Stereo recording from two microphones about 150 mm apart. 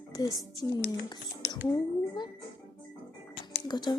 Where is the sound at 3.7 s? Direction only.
30° left (ahead or behind).